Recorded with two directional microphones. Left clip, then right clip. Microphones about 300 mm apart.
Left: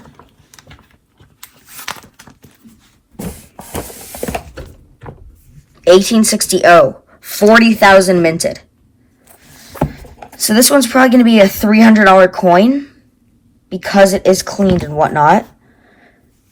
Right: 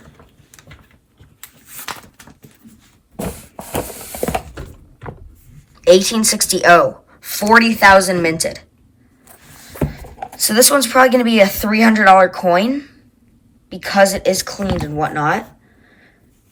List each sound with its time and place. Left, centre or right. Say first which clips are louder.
4.2 s mechanisms: right 1 dB; centre
5.8 s speech: left 3 dB; centre
9.2 s rowboat: left 1 dB; centre
10.3 s speech: left 2 dB; centre
15.9 s sniff: left 3 dB; centre